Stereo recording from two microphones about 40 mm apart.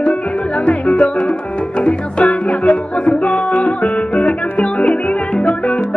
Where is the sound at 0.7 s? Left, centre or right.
Left.